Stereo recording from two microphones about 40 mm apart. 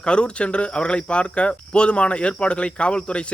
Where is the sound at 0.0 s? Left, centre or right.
Left.